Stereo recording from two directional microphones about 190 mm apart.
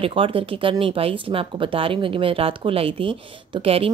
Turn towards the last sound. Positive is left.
turn(degrees=-30)  # may be behind; listen again after turning